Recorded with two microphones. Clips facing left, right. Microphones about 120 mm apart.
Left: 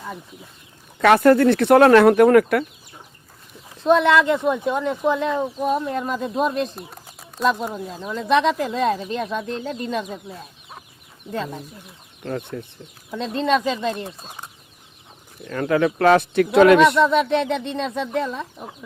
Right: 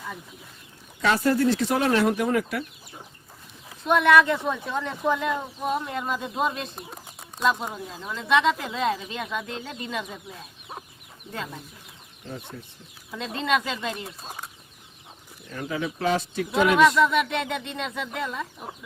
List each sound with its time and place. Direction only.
0.9 s speech: 60° left (ahead or behind)
3.8 s a child's voice: 25° left (ahead or behind)
5.6 s speech: 40° left (ahead or behind)
7.4 s speech: 40° left (ahead or behind)
11.3 s speech: 35° left (ahead or behind)
12.2 s speech: 70° left (ahead or behind)
13.1 s speech: 35° left (ahead or behind)
15.4 s speech: 70° left (ahead or behind)
17.0 s speech: 30° left (ahead or behind)